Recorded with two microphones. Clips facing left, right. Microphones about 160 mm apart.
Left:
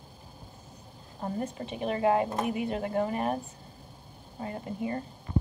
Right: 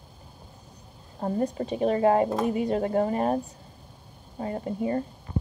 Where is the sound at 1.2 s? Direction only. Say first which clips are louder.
Right 6 dB; 35° right (ahead or behind).